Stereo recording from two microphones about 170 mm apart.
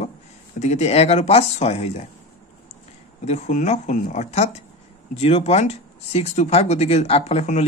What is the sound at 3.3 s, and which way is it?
A man's voice, 40° left (ahead or behind).